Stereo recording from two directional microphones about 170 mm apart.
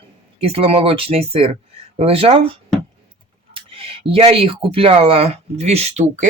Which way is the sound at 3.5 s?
35° right (ahead or behind).